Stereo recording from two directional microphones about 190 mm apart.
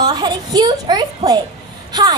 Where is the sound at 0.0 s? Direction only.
20° right (ahead or behind).